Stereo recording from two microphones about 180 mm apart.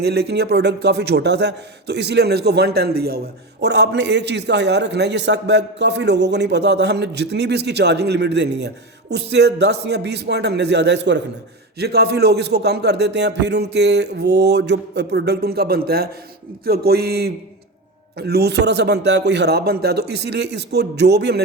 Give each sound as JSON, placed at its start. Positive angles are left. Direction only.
{"t": 0.0, "sound": "speech", "side_deg": -65}
{"t": 3.6, "sound": "a man's voice", "side_deg": -70}